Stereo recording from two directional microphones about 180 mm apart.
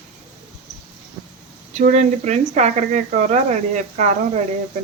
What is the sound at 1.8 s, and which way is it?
Speech, 40° right (ahead or behind).